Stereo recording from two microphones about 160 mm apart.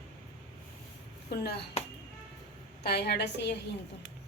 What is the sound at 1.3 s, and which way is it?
Speech, 90° left.